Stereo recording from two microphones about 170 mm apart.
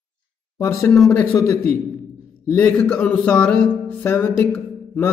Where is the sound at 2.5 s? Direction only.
5° left (ahead or behind).